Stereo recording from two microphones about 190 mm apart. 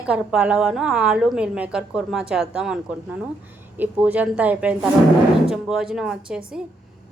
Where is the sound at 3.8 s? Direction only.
10° right (ahead or behind).